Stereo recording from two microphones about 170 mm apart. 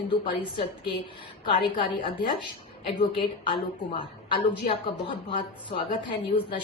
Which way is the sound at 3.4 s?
30° left (ahead or behind).